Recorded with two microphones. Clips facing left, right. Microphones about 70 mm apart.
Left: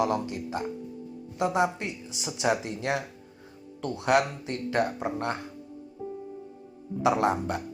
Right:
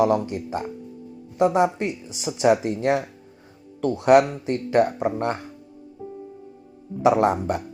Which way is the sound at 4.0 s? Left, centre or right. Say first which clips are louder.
Right 8 dB; right.